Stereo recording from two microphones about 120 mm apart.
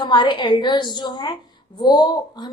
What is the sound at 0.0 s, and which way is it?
A woman's voice, 40° left (ahead or behind).